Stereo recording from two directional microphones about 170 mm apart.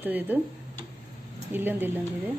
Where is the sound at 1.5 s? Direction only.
10° right (ahead or behind).